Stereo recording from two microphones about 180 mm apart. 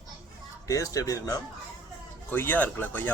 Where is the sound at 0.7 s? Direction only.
20° left (ahead or behind).